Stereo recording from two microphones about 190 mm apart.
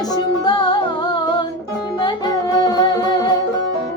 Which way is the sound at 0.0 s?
20° left (ahead or behind).